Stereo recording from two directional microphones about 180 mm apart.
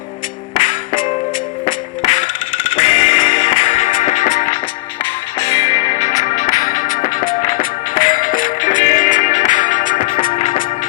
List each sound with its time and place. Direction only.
0.5 s music: 45° left (ahead or behind)
5.4 s music: 20° left (ahead or behind)
5.7 s music: 40° left (ahead or behind)
10.3 s music: 35° left (ahead or behind)